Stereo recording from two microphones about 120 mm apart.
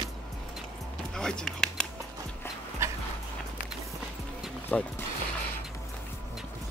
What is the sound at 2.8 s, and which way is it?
Dog, 25° right (ahead or behind).